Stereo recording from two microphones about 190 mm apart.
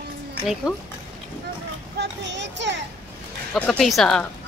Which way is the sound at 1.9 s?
70° right (ahead or behind).